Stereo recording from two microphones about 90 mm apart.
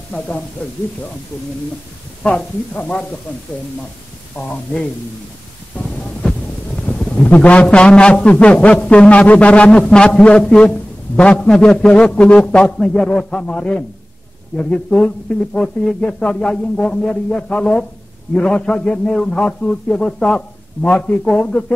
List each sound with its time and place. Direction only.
0.6 s a man's voice: 15° left (ahead or behind)
2.2 s a man's voice: 10° left (ahead or behind)
5.7 s thunder: 20° left (ahead or behind)
6.9 s a man's voice: 15° left (ahead or behind)